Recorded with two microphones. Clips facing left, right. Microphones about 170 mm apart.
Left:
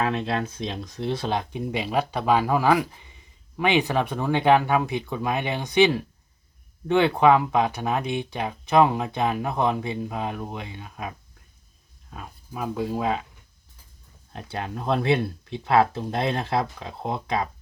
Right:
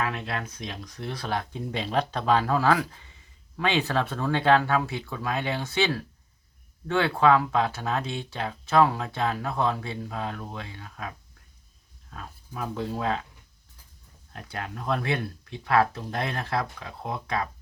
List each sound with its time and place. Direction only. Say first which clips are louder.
0.0 s speech: left 5 dB; 25° left (ahead or behind)
12.1 s speech: left 2 dB; 15° left (ahead or behind)
14.3 s speech: left 4 dB; 25° left (ahead or behind)